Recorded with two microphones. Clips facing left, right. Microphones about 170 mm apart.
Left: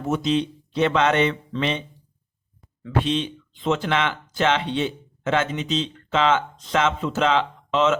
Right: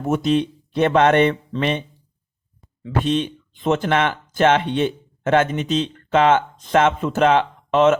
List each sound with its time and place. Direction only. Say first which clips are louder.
0.0 s speech: right 3 dB; 55° right (ahead or behind)
3.0 s speech: right 4 dB; 50° right (ahead or behind)